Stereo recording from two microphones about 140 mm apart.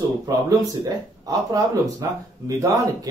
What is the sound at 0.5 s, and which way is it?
Speech, 25° right (ahead or behind).